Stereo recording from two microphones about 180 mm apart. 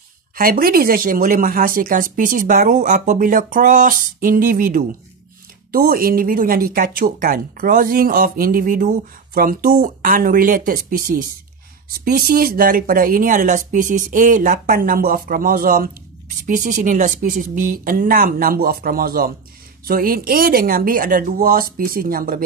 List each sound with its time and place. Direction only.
0.4 s speech: 55° right (ahead or behind)